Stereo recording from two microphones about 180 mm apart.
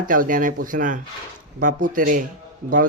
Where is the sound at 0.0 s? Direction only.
50° right (ahead or behind).